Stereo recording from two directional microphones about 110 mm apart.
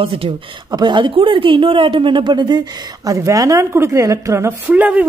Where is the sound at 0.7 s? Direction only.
40° right (ahead or behind).